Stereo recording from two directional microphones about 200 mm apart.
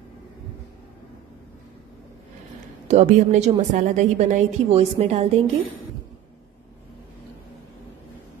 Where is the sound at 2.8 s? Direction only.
35° right (ahead or behind).